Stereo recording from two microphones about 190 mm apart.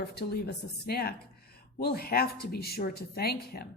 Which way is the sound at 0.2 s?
55° left (ahead or behind).